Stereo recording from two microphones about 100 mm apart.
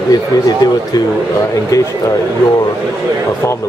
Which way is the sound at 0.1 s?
40° left (ahead or behind).